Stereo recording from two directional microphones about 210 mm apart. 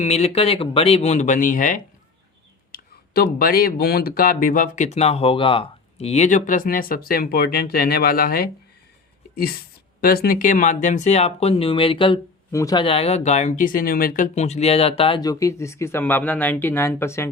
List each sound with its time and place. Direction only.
0.0 s speech: 30° left (ahead or behind); by 17.2 s 10° left (ahead or behind)